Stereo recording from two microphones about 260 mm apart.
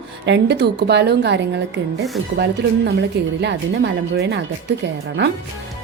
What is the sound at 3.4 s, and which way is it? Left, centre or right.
A woman's voice, right.